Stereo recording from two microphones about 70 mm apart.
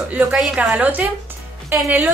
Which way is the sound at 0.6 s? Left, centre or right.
Right.